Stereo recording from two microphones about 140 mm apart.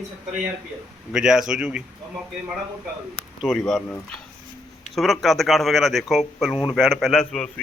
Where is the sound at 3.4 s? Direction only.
5° left (ahead or behind).